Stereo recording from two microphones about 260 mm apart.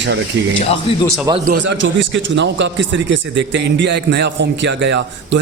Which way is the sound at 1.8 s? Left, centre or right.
Right.